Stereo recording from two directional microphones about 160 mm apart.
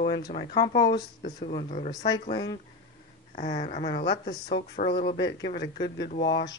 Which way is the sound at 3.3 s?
50° left (ahead or behind).